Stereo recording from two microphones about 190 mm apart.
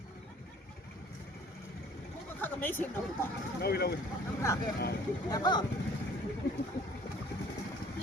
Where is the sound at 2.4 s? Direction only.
10° left (ahead or behind).